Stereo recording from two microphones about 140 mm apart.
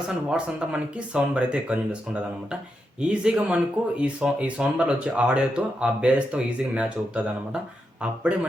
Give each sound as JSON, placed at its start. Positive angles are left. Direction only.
{"t": 0.3, "sound": "speech", "side_deg": -5}